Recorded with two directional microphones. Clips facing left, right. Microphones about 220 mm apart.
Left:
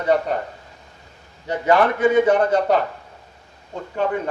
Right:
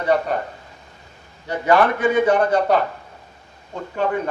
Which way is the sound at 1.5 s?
20° left (ahead or behind).